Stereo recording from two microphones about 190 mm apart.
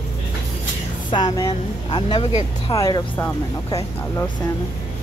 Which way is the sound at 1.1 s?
25° left (ahead or behind).